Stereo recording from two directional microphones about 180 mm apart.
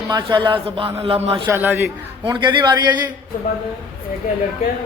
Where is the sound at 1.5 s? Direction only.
10° right (ahead or behind).